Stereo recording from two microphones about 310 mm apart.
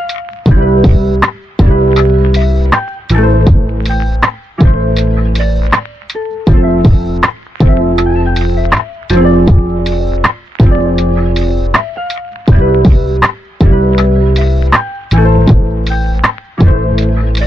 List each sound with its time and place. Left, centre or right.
0.0 s music: centre